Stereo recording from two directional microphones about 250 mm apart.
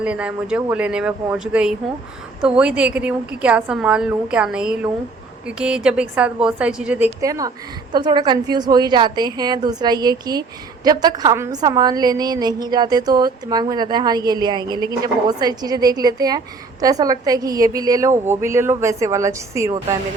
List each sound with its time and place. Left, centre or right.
0.0 s a woman's voice: centre